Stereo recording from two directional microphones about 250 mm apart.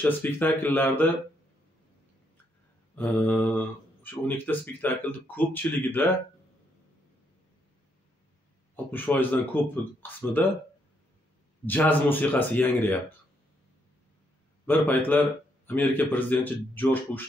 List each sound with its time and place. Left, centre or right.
0.0 s speech: centre
3.0 s speech: centre
8.7 s speech: centre
11.6 s speech: centre
14.7 s speech: centre